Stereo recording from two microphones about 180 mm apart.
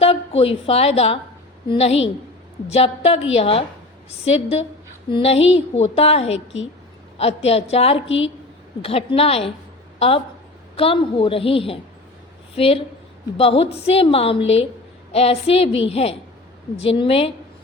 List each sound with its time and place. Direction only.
0.0 s a woman's voice: 30° left (ahead or behind)
10.8 s a woman's voice: 30° left (ahead or behind)